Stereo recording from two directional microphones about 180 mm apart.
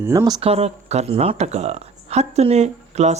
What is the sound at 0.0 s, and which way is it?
Speech, 15° right (ahead or behind).